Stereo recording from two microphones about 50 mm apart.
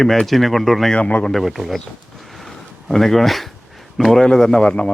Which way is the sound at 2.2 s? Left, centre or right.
Centre.